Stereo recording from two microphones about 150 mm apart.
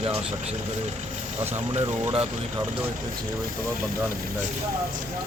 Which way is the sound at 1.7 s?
40° right (ahead or behind).